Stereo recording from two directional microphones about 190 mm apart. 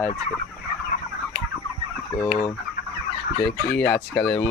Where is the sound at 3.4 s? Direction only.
65° left (ahead or behind).